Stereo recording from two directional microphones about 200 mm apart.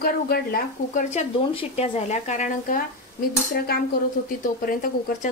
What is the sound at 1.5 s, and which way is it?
A woman's voice, 30° left (ahead or behind).